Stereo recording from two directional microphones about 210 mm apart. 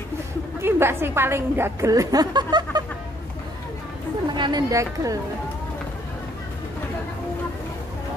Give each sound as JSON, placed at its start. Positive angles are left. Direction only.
{"t": 0.6, "sound": "a woman's voice", "side_deg": -10}
{"t": 4.3, "sound": "a woman's voice", "side_deg": -20}